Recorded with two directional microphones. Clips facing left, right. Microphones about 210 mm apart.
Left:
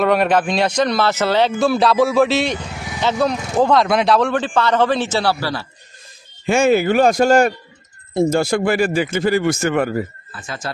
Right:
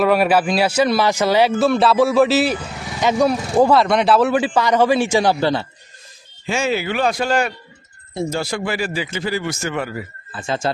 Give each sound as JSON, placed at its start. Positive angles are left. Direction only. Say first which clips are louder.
{"t": 0.0, "sound": "speech", "louder": "even", "side_deg": -5}
{"t": 1.6, "sound": "speech", "louder": "even", "side_deg": 0}
{"t": 6.4, "sound": "speech", "louder": "left 6 dB", "side_deg": 50}
{"t": 10.3, "sound": "speech", "louder": "right 8 dB", "side_deg": -25}